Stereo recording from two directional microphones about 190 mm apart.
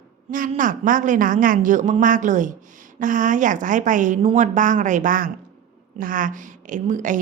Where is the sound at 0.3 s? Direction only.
45° right (ahead or behind).